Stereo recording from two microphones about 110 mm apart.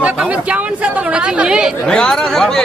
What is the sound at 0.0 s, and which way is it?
Speech, 10° right (ahead or behind).